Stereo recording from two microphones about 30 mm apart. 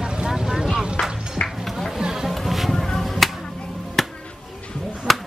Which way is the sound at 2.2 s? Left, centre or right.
Centre.